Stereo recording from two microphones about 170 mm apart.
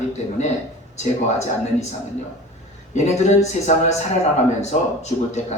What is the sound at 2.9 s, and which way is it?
A man's voice, 40° left (ahead or behind).